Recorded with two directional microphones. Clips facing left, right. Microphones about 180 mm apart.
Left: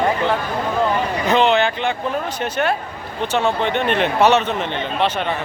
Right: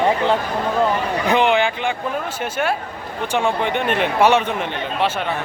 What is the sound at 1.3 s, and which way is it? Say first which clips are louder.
Speech: left 1 dB; 15° right (ahead or behind).